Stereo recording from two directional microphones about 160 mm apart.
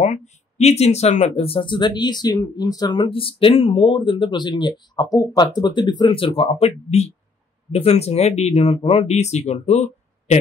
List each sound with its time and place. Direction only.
0.0 s speech: 45° left (ahead or behind)